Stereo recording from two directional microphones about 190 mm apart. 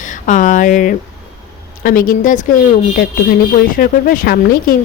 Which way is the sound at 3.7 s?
50° left (ahead or behind).